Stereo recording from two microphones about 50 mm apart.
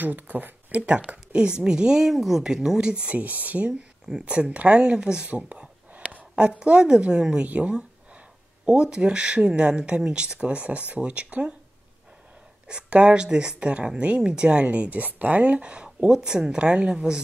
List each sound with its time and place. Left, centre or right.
0.0 s speech: right
0.7 s speech: right
4.1 s speech: centre
5.3 s a sound: right
6.6 s speech: centre
7.4 s speech: right
12.6 s speech: centre